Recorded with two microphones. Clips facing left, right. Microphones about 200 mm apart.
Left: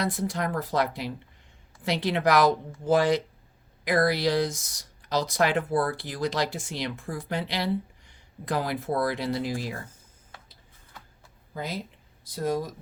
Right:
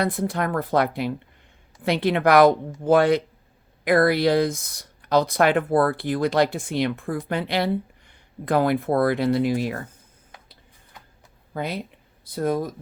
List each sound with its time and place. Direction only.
0.0 s speech: 55° right (ahead or behind)
10.3 s tick-tock: 15° right (ahead or behind)
11.5 s speech: 65° right (ahead or behind)